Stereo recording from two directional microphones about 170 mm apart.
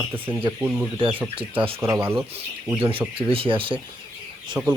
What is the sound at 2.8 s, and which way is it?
Speech, 30° right (ahead or behind).